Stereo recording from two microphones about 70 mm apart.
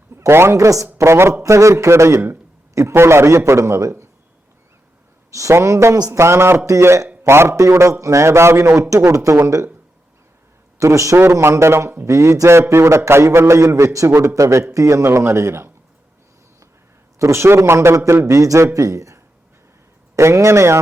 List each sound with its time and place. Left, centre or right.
0.2 s speech: right
0.5 s a man's voice: right
0.9 s a man's voice: right
5.3 s a man's voice: right
10.8 s a man's voice: right
17.2 s a man's voice: right